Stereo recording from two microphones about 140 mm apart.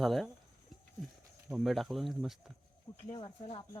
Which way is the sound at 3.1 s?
35° left (ahead or behind).